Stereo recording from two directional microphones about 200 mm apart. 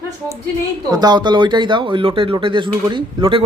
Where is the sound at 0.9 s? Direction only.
20° right (ahead or behind).